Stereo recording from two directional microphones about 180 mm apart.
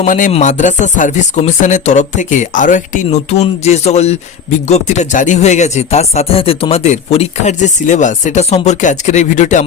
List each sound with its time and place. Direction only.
0.0 s speech: 45° left (ahead or behind)